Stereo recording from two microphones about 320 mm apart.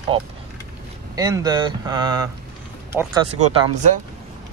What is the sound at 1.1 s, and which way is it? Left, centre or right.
Speech, centre.